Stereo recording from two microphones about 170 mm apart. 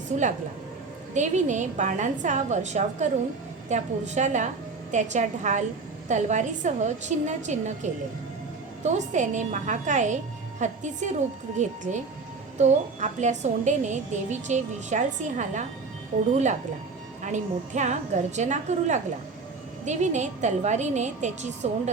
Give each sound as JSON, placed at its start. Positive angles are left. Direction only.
{"t": 0.1, "sound": "a woman's voice", "side_deg": -45}